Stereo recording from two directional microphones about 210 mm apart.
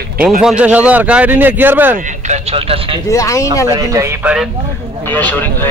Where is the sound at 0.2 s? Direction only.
5° right (ahead or behind).